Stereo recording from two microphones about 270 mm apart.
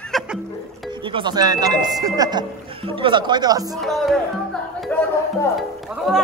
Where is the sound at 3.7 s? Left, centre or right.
Centre.